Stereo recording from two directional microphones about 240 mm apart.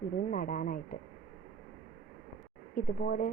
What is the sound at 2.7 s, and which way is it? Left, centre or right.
Speech, left.